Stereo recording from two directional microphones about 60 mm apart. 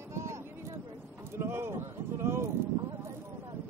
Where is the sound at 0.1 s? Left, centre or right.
Right.